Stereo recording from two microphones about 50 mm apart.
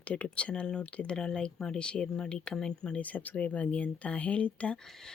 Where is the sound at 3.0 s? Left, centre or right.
Left.